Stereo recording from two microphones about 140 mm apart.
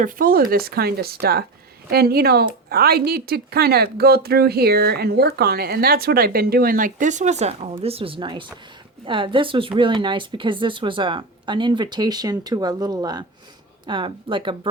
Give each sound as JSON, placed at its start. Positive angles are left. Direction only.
{"t": 0.0, "sound": "speech", "side_deg": -80}